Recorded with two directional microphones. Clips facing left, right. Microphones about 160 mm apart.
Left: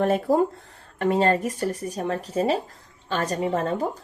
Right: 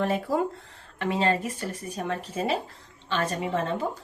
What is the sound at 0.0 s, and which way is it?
Speech, 45° left (ahead or behind).